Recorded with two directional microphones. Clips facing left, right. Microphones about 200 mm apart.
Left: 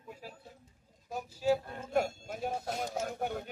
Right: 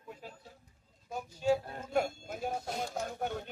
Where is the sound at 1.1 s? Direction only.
5° left (ahead or behind).